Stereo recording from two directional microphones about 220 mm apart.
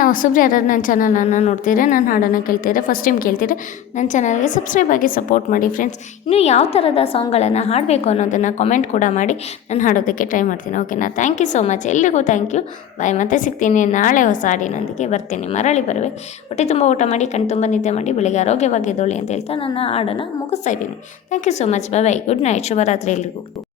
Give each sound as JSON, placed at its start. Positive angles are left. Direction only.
{"t": 0.0, "sound": "a woman's voice", "side_deg": 40}